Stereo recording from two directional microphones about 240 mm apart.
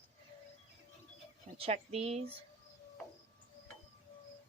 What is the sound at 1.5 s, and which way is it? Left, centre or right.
Speech, right.